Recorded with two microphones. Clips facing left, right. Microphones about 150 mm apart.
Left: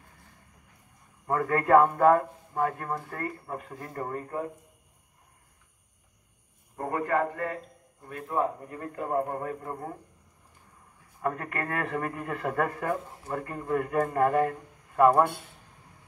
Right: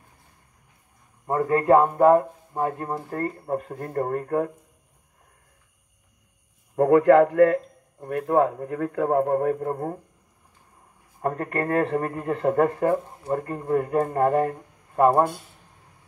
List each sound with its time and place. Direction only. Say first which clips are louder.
1.2 s speech: right 5 dB; 25° right (ahead or behind)
3.3 s speech: right 8 dB; 45° right (ahead or behind); by 4.5 s 65° right (ahead or behind)
6.7 s a man's voice: right 13 dB; 90° right; by 9.9 s 55° right (ahead or behind)
11.1 s a man's voice: right 5 dB; 40° right (ahead or behind)